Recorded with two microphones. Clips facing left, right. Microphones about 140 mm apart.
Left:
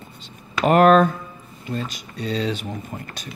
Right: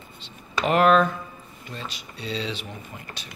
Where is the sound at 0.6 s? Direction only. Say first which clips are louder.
Left 5 dB; 45° left (ahead or behind).